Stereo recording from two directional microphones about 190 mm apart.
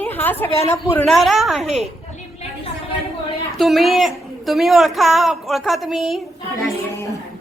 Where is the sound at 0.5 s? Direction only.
35° left (ahead or behind).